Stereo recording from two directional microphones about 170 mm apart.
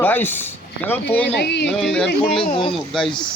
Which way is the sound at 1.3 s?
80° left.